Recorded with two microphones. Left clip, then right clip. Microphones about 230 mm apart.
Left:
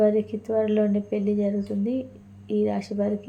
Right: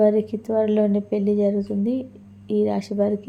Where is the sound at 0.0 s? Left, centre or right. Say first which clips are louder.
Right 3 dB; right.